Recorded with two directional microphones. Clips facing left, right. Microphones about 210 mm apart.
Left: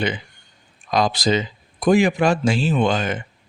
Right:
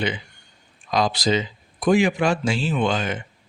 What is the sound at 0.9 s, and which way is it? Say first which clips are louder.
Speech: left 2 dB; 45° left (ahead or behind).